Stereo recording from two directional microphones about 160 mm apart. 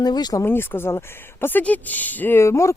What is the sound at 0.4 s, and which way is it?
Speech, 15° left (ahead or behind).